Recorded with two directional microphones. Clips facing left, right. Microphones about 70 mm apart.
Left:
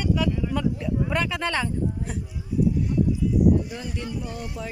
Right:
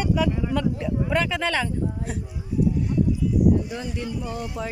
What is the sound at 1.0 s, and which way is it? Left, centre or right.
Speech, centre.